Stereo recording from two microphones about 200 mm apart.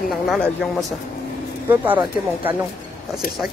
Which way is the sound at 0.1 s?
Centre (ahead or behind).